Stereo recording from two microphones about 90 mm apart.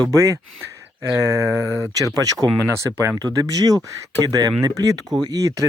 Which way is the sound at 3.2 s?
45° right (ahead or behind).